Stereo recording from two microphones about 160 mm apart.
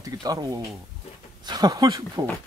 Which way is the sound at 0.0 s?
20° right (ahead or behind).